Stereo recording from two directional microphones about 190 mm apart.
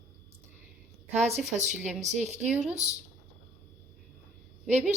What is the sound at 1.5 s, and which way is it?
Speech, 40° right (ahead or behind).